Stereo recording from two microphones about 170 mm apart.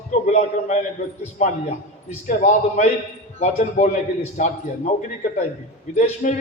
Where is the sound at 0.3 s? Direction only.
45° left (ahead or behind).